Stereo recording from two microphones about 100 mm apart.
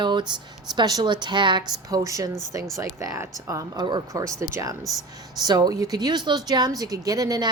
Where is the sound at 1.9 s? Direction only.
35° right (ahead or behind).